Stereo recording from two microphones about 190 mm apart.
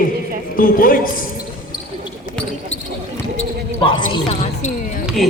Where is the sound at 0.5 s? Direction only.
45° left (ahead or behind).